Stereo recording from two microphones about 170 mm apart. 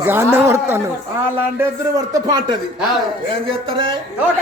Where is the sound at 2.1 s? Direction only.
25° right (ahead or behind).